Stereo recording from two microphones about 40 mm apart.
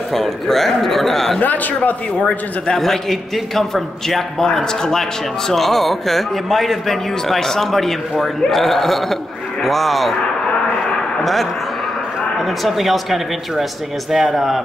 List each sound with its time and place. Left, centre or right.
0.1 s a man's voice: centre
1.4 s speech: left
2.6 s a man's voice: centre
5.5 s a man's voice: centre
12.4 s a man's voice: centre